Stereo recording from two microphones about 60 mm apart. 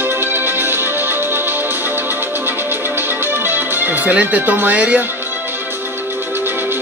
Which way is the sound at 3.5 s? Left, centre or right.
Right.